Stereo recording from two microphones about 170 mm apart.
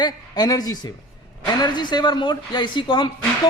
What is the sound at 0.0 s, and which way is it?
A man's voice, 25° left (ahead or behind).